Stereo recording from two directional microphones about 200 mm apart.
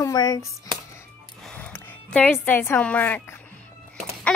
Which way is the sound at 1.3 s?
5° left (ahead or behind).